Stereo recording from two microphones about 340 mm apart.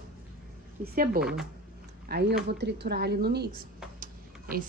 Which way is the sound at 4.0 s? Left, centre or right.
Right.